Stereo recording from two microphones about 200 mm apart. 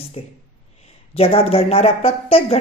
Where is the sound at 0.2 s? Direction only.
25° left (ahead or behind).